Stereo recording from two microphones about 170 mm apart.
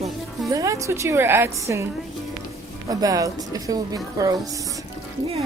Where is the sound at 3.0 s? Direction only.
20° right (ahead or behind).